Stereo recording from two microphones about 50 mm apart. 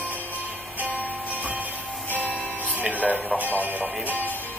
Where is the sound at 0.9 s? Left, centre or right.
Right.